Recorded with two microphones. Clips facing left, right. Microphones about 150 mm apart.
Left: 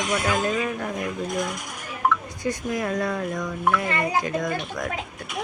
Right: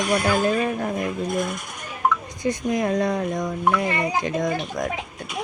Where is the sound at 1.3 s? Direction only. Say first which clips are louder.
Right 2 dB; 15° left (ahead or behind).